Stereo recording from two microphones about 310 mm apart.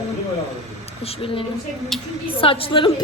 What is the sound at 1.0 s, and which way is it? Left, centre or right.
Speech, centre.